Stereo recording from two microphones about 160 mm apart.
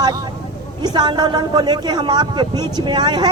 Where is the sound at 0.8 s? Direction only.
25° right (ahead or behind).